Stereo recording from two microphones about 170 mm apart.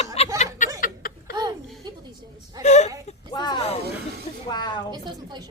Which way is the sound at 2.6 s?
40° left (ahead or behind).